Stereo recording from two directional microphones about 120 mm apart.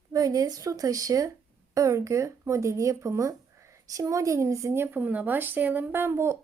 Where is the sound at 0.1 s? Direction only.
30° right (ahead or behind).